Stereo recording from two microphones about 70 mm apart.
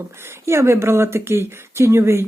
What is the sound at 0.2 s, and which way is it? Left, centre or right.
Speech, right.